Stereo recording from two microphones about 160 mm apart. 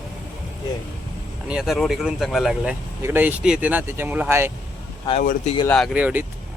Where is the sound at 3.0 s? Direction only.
15° right (ahead or behind).